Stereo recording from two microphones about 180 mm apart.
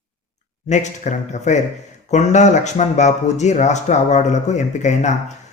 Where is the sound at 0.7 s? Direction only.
40° left (ahead or behind).